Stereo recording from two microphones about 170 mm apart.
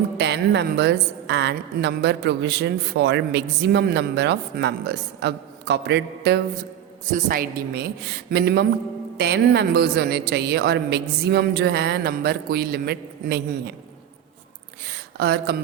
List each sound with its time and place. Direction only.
0.2 s a woman's voice: 90° right
7.1 s speech: 55° right (ahead or behind)
15.2 s speech: 75° right (ahead or behind)